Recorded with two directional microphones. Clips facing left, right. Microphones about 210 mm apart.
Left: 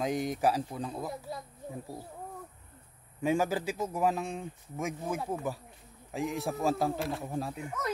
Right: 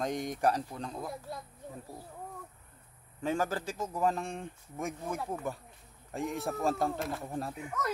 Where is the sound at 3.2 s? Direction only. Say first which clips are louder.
Left 3 dB; 10° left (ahead or behind).